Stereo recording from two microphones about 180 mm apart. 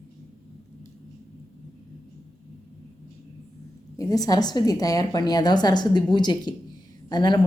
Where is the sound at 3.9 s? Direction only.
20° left (ahead or behind).